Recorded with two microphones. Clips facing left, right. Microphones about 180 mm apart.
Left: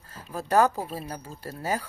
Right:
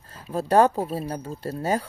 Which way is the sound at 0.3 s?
30° right (ahead or behind).